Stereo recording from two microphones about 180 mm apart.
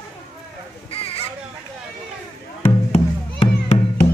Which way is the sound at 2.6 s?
35° left (ahead or behind).